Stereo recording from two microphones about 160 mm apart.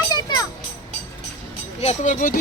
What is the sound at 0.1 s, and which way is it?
Music, 25° left (ahead or behind).